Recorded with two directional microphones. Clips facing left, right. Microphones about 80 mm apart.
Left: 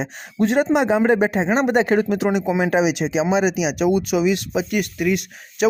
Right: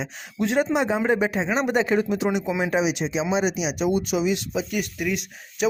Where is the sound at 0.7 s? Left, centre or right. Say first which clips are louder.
Left 5 dB; left.